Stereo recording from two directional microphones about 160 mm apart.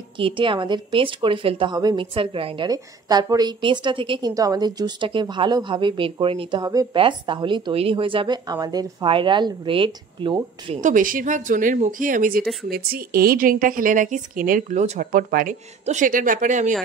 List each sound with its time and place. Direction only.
0.2 s a woman's voice: 30° right (ahead or behind)
10.8 s a woman's voice: 55° right (ahead or behind)
12.6 s a woman's voice: 70° right (ahead or behind); by 16.7 s 50° right (ahead or behind)